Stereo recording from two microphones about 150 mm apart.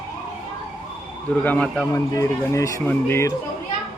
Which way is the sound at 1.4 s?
5° left (ahead or behind).